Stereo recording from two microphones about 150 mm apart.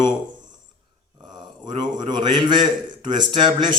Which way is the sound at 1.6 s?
30° right (ahead or behind).